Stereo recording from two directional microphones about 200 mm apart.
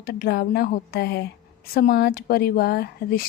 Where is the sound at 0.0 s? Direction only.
50° left (ahead or behind).